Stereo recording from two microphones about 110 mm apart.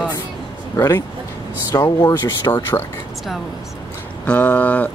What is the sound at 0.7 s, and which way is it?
Speech, 30° left (ahead or behind).